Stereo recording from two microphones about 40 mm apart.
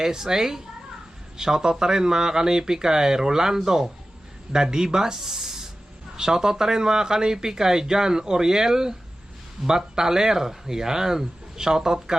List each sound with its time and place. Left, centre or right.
0.0 s speech: centre